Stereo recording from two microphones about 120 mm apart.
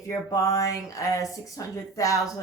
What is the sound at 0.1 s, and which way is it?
Speech, 25° left (ahead or behind).